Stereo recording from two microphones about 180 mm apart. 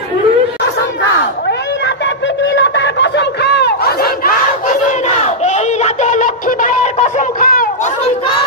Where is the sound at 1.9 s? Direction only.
75° left (ahead or behind); by 7.9 s 55° left (ahead or behind).